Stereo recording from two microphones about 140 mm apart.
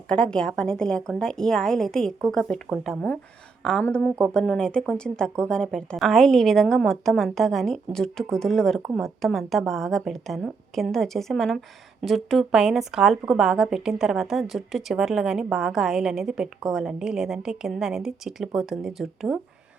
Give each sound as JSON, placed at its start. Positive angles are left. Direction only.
{"t": 0.1, "sound": "speech", "side_deg": 5}